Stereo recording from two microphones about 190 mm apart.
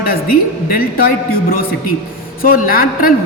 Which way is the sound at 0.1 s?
50° left (ahead or behind).